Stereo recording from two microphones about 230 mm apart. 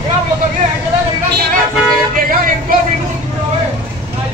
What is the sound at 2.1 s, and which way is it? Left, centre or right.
Speech, right.